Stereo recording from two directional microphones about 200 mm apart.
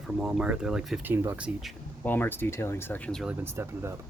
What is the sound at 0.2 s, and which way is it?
Speech, 5° right (ahead or behind).